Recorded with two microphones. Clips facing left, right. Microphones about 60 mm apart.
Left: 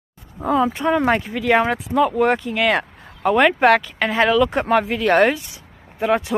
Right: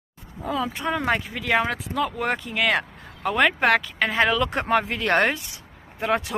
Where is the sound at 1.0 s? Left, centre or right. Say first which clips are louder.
Left 6 dB; centre.